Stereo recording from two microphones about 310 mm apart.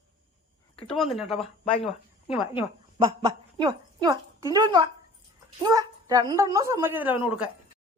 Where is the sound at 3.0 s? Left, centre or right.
Centre.